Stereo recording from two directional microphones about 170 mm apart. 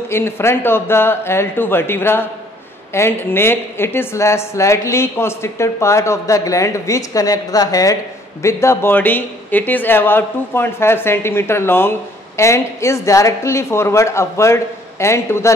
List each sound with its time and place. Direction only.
0.1 s a woman's voice: 15° left (ahead or behind)